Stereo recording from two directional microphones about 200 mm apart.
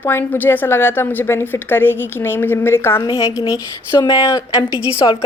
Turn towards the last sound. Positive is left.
turn(degrees=20)  # may be behind; listen again after turning